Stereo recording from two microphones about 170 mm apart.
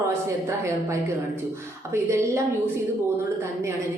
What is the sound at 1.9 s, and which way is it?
Speech, 15° right (ahead or behind).